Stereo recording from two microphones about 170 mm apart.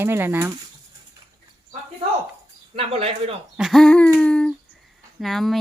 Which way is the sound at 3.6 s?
Centre (ahead or behind).